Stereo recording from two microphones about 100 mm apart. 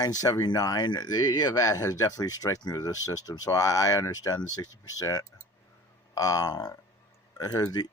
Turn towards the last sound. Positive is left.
turn(degrees=40)  # may be behind; listen again after turning